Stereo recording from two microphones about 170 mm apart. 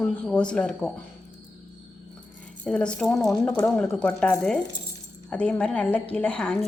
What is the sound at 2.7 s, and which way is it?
A woman's voice, 5° left (ahead or behind).